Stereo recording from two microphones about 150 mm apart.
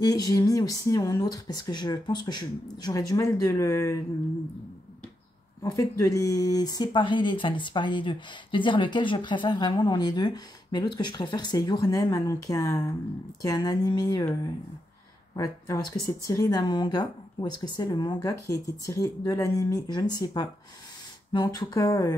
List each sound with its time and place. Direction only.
0.0 s speech: 25° left (ahead or behind)
5.6 s speech: 20° left (ahead or behind)